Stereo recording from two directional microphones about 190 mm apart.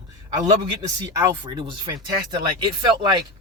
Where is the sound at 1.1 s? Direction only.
15° right (ahead or behind).